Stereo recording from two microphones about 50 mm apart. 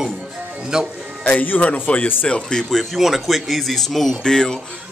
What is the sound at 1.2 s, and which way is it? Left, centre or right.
A man's voice, left.